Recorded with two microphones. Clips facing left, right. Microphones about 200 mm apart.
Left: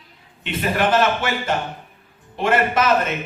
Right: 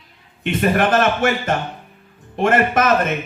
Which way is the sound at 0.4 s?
50° right (ahead or behind).